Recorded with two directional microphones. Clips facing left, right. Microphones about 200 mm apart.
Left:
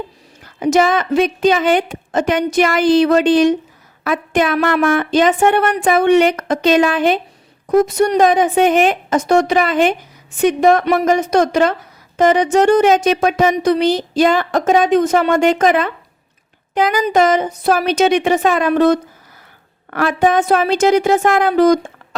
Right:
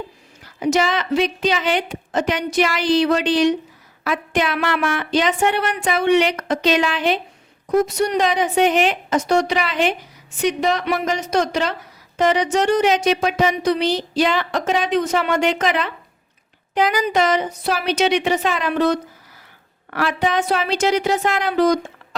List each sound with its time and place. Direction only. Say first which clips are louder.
0.4 s a woman's voice: left 5 dB; 50° left (ahead or behind)